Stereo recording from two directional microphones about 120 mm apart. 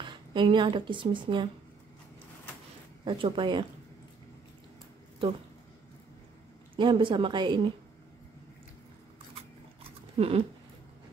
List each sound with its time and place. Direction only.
0.0 s speech: 40° right (ahead or behind)
3.1 s speech: 45° right (ahead or behind)
6.8 s a woman's voice: 40° right (ahead or behind)
10.1 s a sound: 55° right (ahead or behind)